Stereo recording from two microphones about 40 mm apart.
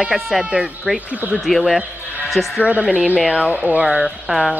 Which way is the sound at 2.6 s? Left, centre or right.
Right.